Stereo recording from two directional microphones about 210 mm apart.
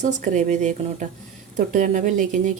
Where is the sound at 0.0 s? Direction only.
35° right (ahead or behind).